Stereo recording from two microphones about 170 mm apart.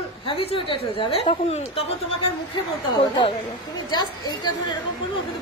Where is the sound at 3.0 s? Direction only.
25° left (ahead or behind).